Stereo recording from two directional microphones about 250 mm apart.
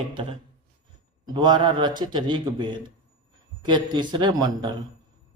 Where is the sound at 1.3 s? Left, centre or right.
Centre.